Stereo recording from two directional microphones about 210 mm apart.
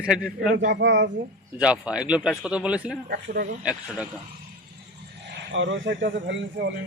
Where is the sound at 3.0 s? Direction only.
50° right (ahead or behind).